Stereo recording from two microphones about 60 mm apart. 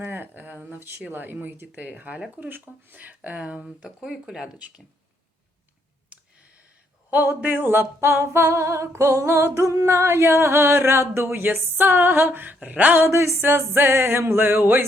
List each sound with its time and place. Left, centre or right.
0.0 s speech: right
2.9 s music: right
3.2 s speech: right
7.1 s a sound: right
11.1 s music: right
12.6 s speech: right
13.0 s music: right